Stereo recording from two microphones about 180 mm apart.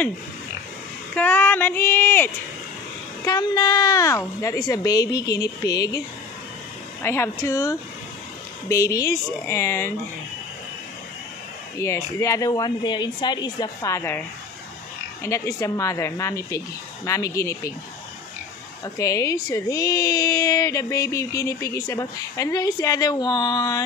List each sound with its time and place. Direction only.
1.1 s speech: 10° left (ahead or behind)
11.8 s speech: 15° left (ahead or behind)
15.2 s speech: 15° left (ahead or behind)
18.9 s speech: 20° left (ahead or behind)